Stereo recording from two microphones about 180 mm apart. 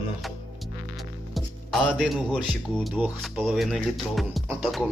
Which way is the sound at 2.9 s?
10° right (ahead or behind).